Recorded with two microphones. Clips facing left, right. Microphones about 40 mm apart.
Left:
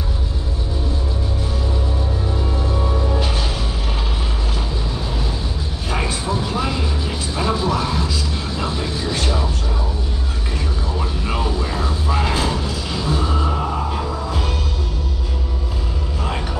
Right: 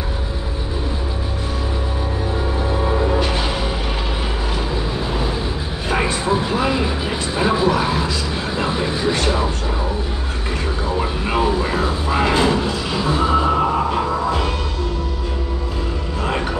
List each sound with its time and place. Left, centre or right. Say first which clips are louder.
3.2 s music: right 3 dB; centre
6.2 s vehicle: right 4 dB; centre
11.0 s music: right 4 dB; right